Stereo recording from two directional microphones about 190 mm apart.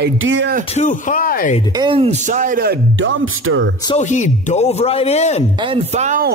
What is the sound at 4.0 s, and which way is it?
Music, 40° left (ahead or behind).